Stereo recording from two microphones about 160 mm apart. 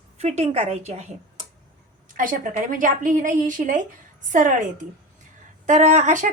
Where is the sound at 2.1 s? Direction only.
55° right (ahead or behind).